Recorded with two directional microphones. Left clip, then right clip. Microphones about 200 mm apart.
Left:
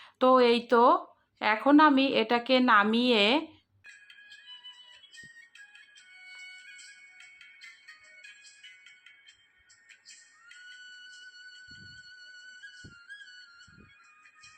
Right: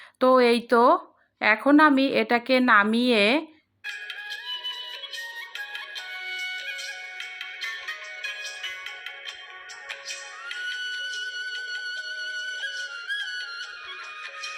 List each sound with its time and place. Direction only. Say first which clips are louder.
0.2 s a woman's voice: right 3 dB; 15° right (ahead or behind)
3.8 s music: right 17 dB; 45° right (ahead or behind)
9.9 s music: right 18 dB; 45° right (ahead or behind)